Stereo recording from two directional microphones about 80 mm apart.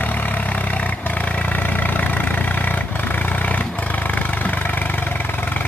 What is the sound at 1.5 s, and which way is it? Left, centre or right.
Vehicle, left.